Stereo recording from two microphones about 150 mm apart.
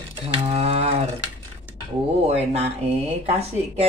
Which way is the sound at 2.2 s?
45° right (ahead or behind).